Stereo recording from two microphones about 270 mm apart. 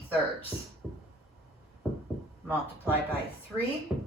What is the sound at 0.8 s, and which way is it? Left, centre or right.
Music, centre.